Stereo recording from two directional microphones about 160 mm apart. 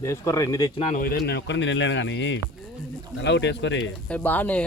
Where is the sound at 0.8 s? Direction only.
45° left (ahead or behind).